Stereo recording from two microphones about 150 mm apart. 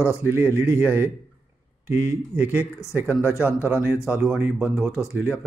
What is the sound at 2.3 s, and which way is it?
Speech, 10° right (ahead or behind).